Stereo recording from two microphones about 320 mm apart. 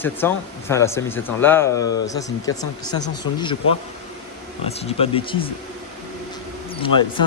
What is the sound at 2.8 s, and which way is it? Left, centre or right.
Speech, left.